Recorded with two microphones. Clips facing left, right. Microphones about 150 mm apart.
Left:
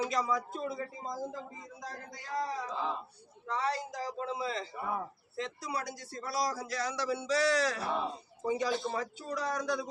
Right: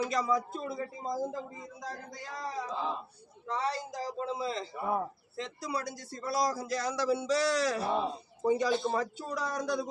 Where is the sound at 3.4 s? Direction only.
35° right (ahead or behind).